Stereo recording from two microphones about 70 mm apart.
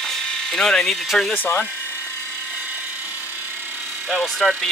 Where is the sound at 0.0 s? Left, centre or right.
Centre.